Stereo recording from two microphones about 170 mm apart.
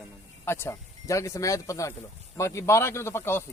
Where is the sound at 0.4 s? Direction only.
15° left (ahead or behind).